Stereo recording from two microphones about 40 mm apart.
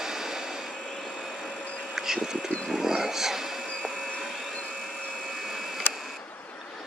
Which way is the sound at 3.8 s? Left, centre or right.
Centre.